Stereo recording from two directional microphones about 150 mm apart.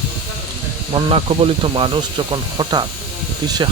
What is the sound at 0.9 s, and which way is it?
Speech, 40° right (ahead or behind).